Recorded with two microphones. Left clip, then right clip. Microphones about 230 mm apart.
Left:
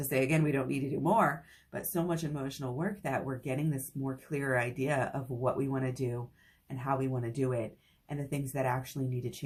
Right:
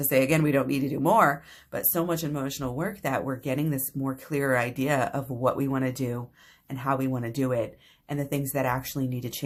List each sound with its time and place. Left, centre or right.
0.1 s speech: right